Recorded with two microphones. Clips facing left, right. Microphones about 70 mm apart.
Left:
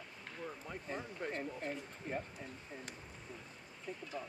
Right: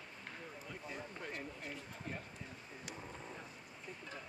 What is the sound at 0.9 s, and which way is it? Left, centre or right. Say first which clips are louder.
Speech: left 6 dB; left.